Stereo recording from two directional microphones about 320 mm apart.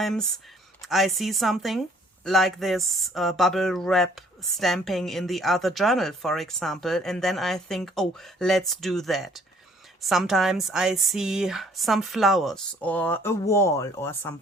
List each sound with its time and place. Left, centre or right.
0.0 s speech: centre